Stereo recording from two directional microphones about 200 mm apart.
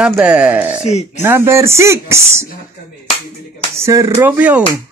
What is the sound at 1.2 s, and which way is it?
Speech, 10° right (ahead or behind).